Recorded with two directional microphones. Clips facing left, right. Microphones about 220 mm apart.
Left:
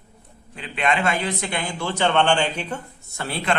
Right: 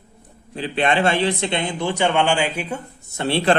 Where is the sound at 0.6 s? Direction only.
35° right (ahead or behind); by 2.8 s 10° right (ahead or behind).